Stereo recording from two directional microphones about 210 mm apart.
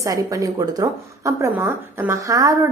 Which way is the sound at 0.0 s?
15° right (ahead or behind).